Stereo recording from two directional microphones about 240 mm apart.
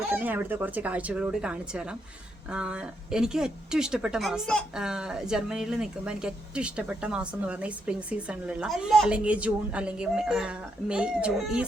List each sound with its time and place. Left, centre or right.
0.1 s speech: centre